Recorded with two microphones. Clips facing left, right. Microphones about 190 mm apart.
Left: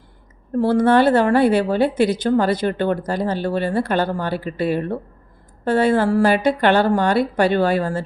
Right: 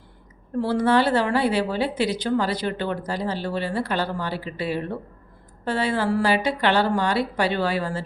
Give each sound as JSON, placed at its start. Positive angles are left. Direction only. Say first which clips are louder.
{"t": 0.6, "sound": "a woman's voice", "louder": "left 5 dB", "side_deg": 50}